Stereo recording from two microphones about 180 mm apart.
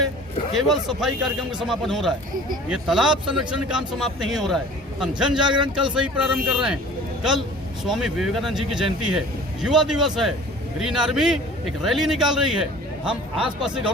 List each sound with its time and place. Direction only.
0.5 s speech: centre (ahead or behind)
5.5 s speech: 25° right (ahead or behind)
5.7 s speech: 5° right (ahead or behind)
7.9 s speech: centre (ahead or behind)
13.6 s speech: 5° right (ahead or behind)